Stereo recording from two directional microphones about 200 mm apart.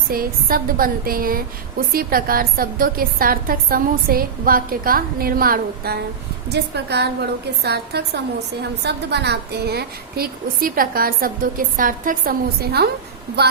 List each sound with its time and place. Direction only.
0.1 s a woman's voice: 45° right (ahead or behind)